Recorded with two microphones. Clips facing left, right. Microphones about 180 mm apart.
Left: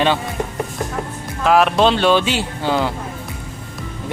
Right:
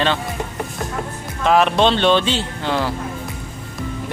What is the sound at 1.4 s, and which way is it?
Speech, 5° left (ahead or behind).